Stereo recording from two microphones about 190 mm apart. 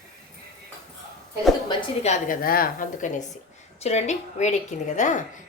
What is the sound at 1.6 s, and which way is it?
Speech, 25° left (ahead or behind).